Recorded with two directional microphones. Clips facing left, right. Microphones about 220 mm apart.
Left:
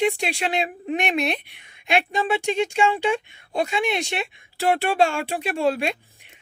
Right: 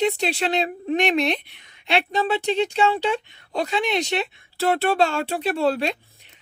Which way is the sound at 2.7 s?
10° left (ahead or behind).